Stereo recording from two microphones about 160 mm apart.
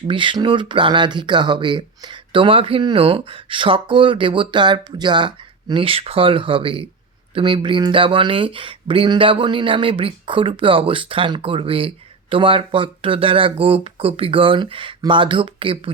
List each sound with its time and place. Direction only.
0.1 s speech: 30° right (ahead or behind)